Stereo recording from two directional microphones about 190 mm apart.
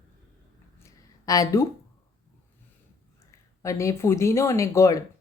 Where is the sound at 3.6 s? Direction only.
15° left (ahead or behind).